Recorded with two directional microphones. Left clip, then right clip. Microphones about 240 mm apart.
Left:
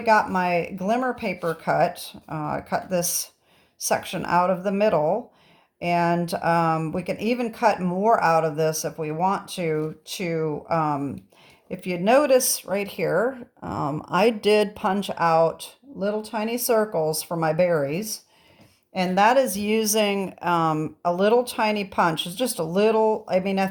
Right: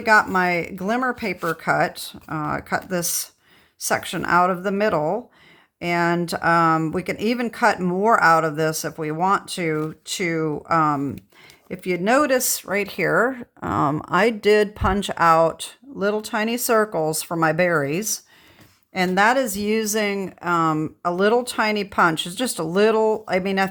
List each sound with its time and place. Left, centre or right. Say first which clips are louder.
0.0 s speech: right 3 dB; right